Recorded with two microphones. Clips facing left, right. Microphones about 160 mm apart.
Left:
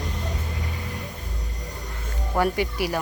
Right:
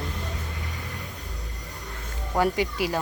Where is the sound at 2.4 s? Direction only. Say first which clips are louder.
Even; 20° right (ahead or behind).